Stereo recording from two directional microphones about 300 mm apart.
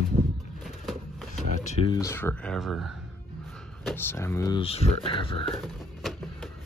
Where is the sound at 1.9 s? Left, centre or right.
Centre.